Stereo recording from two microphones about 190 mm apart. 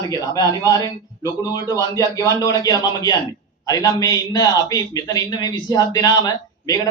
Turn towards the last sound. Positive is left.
turn(degrees=20)  # may be behind; listen again after turning